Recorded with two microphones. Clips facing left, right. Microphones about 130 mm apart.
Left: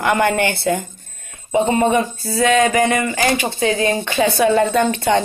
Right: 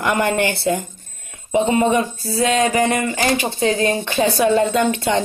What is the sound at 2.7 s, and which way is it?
Speech, 40° right (ahead or behind).